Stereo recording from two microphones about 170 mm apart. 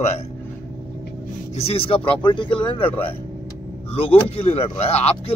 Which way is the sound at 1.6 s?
35° left (ahead or behind).